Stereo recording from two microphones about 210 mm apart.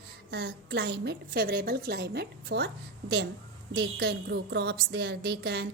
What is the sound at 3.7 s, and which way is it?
A woman's voice, 50° right (ahead or behind).